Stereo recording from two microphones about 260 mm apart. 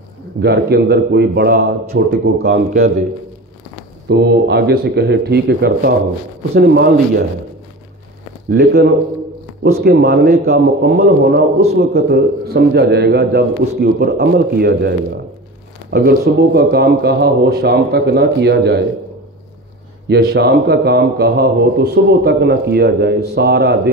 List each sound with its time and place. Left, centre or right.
0.4 s a man's voice: right
4.1 s a man's voice: right
8.5 s a man's voice: right
20.1 s a man's voice: right